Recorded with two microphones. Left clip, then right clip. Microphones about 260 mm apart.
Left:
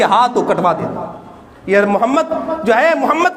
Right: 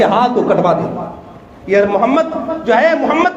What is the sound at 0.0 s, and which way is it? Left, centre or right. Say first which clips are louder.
A man's voice: even; left.